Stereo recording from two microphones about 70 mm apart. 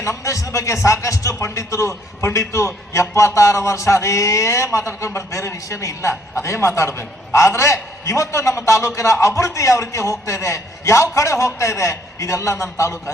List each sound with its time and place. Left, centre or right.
0.0 s a man's voice: left